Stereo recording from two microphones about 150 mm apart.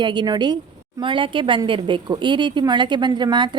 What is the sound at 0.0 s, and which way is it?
A woman's voice, 30° right (ahead or behind).